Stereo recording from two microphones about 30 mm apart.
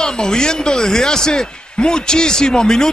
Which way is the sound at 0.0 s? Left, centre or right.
Left.